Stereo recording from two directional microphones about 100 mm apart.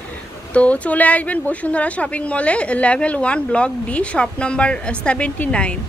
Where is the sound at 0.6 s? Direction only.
15° left (ahead or behind).